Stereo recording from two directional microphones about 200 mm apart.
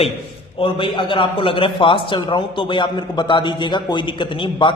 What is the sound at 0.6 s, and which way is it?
A man's voice, 25° left (ahead or behind).